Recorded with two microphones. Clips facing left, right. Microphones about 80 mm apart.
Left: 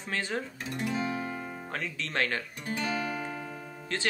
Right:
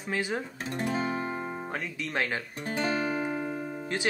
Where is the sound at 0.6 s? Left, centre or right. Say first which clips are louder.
Right 3 dB; right.